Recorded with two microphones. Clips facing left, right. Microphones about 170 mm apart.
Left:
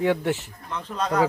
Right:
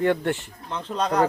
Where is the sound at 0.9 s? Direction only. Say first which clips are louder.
Right 3 dB; 25° right (ahead or behind).